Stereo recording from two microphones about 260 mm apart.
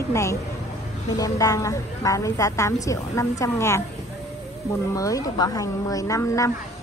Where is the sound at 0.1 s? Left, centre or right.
Centre.